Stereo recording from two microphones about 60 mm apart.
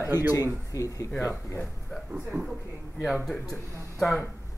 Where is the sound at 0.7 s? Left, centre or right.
Left.